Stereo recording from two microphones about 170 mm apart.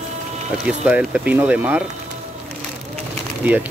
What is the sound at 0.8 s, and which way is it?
Speech, 5° right (ahead or behind).